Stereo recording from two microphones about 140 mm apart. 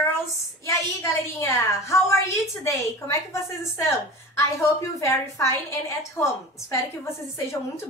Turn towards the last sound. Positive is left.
turn(degrees=20)  # may be behind; listen again after turning